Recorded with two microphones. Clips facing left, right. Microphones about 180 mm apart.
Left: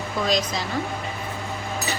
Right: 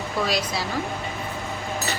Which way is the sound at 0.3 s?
10° right (ahead or behind).